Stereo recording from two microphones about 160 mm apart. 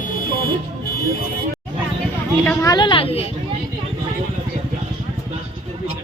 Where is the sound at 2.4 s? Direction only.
20° left (ahead or behind); by 3.3 s 35° left (ahead or behind).